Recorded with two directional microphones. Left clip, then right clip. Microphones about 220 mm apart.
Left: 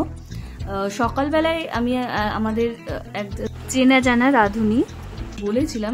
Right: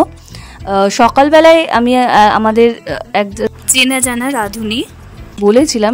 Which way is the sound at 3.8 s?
Centre (ahead or behind).